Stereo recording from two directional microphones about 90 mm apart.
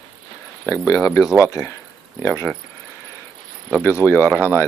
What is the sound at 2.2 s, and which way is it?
Speech, 30° left (ahead or behind).